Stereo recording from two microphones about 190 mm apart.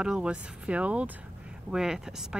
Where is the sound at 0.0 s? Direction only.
5° right (ahead or behind).